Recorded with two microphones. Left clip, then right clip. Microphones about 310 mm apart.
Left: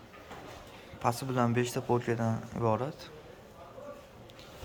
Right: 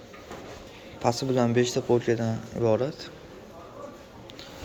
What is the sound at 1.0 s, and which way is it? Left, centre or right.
Speech, centre.